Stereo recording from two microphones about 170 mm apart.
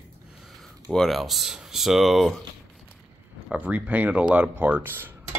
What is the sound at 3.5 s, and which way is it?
Speech, 10° right (ahead or behind).